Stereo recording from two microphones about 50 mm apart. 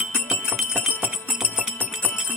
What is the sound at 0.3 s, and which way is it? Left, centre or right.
Jingle bell, centre.